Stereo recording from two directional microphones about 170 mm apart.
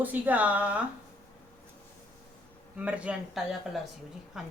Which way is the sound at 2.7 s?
10° right (ahead or behind).